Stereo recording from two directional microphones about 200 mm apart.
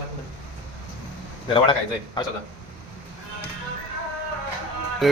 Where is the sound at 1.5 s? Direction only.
25° left (ahead or behind).